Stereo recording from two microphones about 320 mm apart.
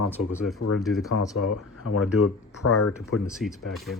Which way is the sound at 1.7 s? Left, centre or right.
Left.